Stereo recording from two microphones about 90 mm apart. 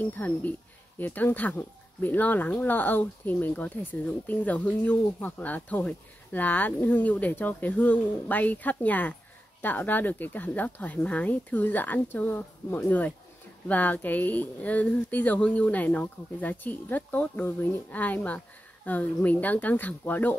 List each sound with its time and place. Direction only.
0.0 s speech: 20° left (ahead or behind)